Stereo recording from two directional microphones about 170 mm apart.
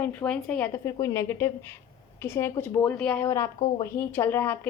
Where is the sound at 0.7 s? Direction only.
20° left (ahead or behind).